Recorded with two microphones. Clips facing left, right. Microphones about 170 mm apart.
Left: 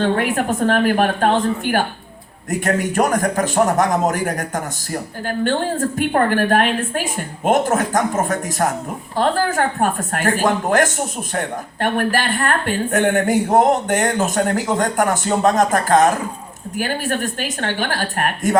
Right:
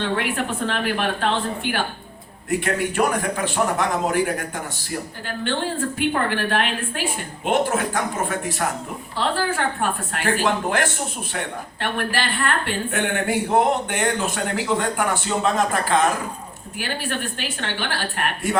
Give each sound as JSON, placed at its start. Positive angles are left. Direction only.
{"t": 0.0, "sound": "a woman's voice", "side_deg": 45}